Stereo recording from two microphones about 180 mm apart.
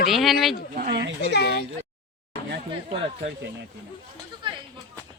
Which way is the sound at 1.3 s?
70° left (ahead or behind).